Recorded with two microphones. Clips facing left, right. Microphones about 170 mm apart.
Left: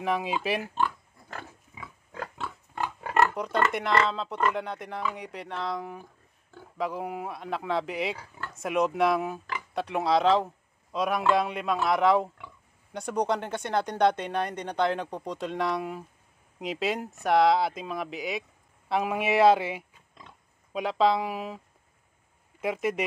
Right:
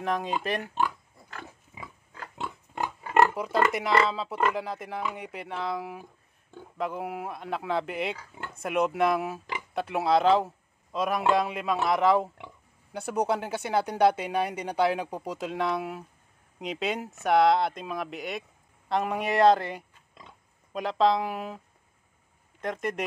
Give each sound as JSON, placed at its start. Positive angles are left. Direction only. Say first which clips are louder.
{"t": 0.0, "sound": "speech", "louder": "left 1 dB", "side_deg": 5}
{"t": 2.4, "sound": "pig", "louder": "right 2 dB", "side_deg": -20}
{"t": 3.3, "sound": "a man's voice", "louder": "right 1 dB", "side_deg": -5}
{"t": 22.6, "sound": "speech", "louder": "left 3 dB", "side_deg": 5}